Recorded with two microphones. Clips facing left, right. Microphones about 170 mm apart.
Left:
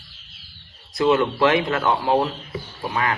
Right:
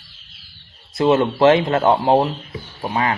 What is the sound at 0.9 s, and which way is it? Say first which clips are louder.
Speech: right 3 dB; 25° right (ahead or behind).